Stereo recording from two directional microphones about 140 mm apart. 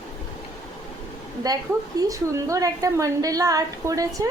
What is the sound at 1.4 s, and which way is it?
A woman's voice, 25° right (ahead or behind).